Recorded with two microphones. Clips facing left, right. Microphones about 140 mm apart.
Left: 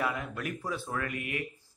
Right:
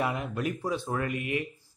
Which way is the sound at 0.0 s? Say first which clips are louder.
Right 3 dB; 20° right (ahead or behind).